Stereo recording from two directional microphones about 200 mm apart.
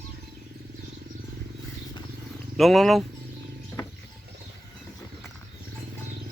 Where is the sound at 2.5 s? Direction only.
Centre (ahead or behind).